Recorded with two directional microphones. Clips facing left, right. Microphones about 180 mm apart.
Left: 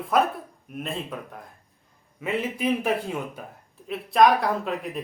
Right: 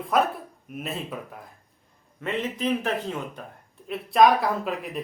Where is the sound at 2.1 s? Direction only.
10° left (ahead or behind).